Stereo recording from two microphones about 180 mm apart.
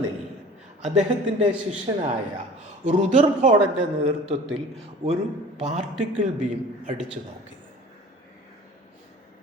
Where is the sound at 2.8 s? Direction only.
40° right (ahead or behind).